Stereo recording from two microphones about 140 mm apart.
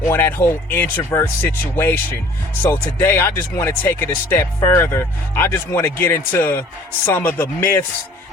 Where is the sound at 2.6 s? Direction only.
15° left (ahead or behind).